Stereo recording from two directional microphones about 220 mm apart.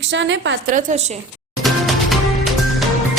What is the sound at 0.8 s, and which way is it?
Speech, 35° right (ahead or behind).